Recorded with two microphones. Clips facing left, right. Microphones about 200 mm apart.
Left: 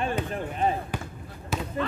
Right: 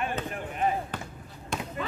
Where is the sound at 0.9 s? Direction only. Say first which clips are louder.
Left 3 dB; 10° left (ahead or behind).